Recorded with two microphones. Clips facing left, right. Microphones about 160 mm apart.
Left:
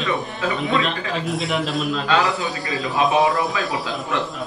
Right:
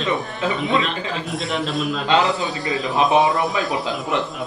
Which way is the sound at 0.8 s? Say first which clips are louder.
Left 2 dB; centre (ahead or behind).